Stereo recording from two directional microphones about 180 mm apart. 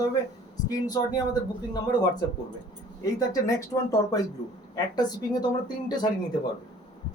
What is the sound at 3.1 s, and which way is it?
Speech, 20° left (ahead or behind).